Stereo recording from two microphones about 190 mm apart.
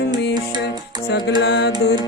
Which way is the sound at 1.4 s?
65° left (ahead or behind).